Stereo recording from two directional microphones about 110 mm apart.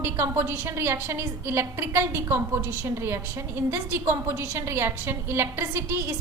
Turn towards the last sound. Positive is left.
turn(degrees=-25)  # may be behind; listen again after turning